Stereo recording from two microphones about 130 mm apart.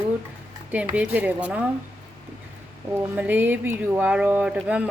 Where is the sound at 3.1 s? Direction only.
15° right (ahead or behind).